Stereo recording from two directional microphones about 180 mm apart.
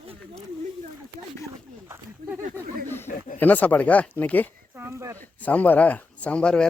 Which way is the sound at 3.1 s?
50° left (ahead or behind).